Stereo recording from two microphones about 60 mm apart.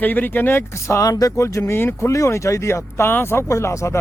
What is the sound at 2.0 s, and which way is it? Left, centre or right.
Speech, left.